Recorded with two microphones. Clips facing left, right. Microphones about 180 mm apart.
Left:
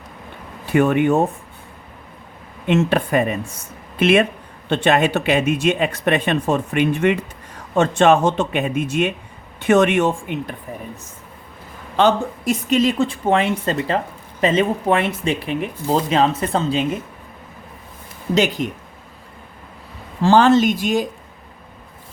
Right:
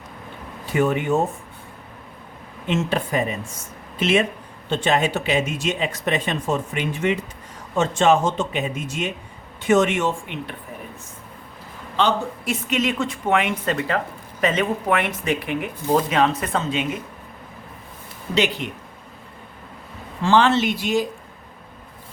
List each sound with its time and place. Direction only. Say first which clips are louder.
0.6 s speech: left 5 dB; 60° left (ahead or behind)
2.6 s speech: left 5 dB; 60° left (ahead or behind)
11.9 s a woman's voice: left 5 dB; 45° left (ahead or behind)
18.3 s speech: left 3 dB; 40° left (ahead or behind)
20.2 s speech: left 5 dB; 40° left (ahead or behind)